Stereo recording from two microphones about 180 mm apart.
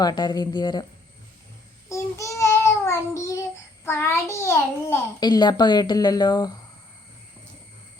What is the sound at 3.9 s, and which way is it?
A child's voice, 15° left (ahead or behind).